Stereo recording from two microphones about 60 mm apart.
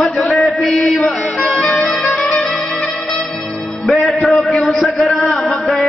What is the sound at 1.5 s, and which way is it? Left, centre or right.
Music, centre.